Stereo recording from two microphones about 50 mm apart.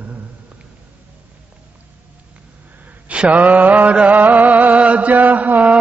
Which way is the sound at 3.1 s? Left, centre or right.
Right.